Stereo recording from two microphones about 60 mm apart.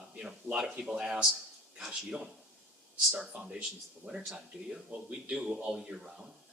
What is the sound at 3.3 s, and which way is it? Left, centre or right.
Speech, centre.